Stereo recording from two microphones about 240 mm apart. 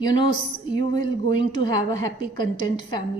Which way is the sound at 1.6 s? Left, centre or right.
Centre.